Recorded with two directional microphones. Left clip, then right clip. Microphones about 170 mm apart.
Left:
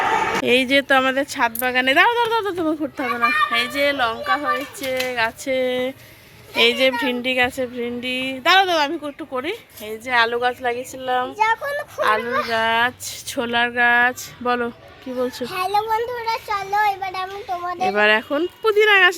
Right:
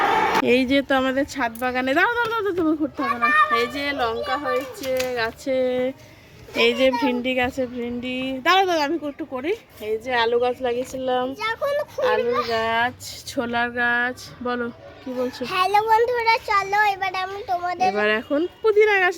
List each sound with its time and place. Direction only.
0.4 s a woman's voice: centre (ahead or behind); by 11.3 s 20° left (ahead or behind)
11.3 s speech: 40° left (ahead or behind)
12.0 s speech: 10° left (ahead or behind)
12.3 s speech: 35° left (ahead or behind)
12.5 s speech: 10° left (ahead or behind); by 15.4 s 30° left (ahead or behind)
15.4 s a child's voice: 20° right (ahead or behind)
15.9 s a child's voice: 35° right (ahead or behind)
17.9 s a woman's voice: 5° left (ahead or behind)